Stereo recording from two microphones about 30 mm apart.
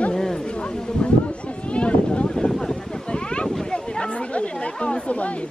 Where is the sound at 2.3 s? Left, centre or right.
Left.